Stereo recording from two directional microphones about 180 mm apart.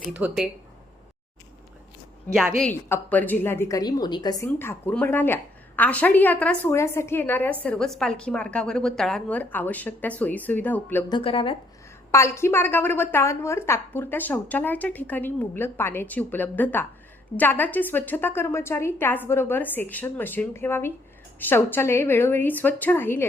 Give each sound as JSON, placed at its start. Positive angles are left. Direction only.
{"t": 0.1, "sound": "speech", "side_deg": -10}
{"t": 2.6, "sound": "a woman's voice", "side_deg": 5}
{"t": 11.1, "sound": "a woman's voice", "side_deg": 30}
{"t": 12.1, "sound": "a woman's voice", "side_deg": 15}